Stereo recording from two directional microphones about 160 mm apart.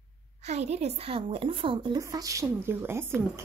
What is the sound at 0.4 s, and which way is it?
A woman's voice, 45° right (ahead or behind).